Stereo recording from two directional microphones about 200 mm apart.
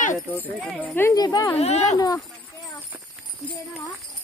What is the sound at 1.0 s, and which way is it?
Speech, 15° left (ahead or behind).